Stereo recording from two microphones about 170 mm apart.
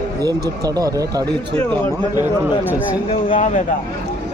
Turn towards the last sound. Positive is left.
turn(degrees=50)  # may be behind; listen again after turning